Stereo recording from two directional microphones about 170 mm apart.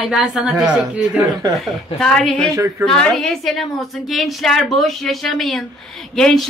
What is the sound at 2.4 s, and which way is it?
Speech, 15° right (ahead or behind).